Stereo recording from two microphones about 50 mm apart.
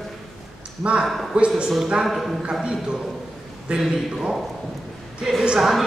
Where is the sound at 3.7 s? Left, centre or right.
Centre.